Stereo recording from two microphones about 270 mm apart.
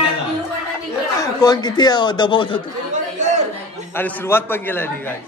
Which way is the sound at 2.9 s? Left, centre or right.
Right.